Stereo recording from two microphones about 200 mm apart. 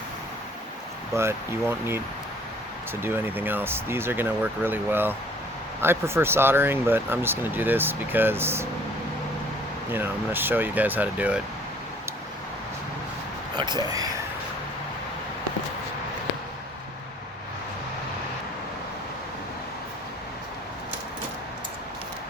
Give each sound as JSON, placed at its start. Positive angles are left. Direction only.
{"t": 1.1, "sound": "speech", "side_deg": -15}
{"t": 3.0, "sound": "speech", "side_deg": -10}
{"t": 9.9, "sound": "speech", "side_deg": -10}
{"t": 13.6, "sound": "speech", "side_deg": -20}